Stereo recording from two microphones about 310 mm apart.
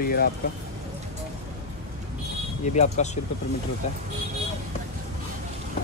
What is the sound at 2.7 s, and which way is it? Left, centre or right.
Speech, left.